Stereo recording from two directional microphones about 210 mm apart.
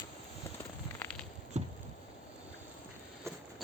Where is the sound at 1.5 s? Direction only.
30° right (ahead or behind).